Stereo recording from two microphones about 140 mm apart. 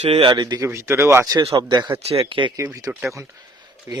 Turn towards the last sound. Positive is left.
turn(degrees=-25)  # may be behind; listen again after turning